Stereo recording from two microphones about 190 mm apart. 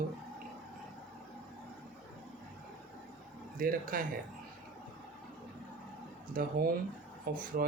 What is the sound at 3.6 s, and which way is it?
Speech, 50° right (ahead or behind).